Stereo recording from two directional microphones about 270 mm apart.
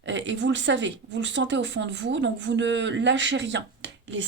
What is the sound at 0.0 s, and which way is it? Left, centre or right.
A woman's voice, right.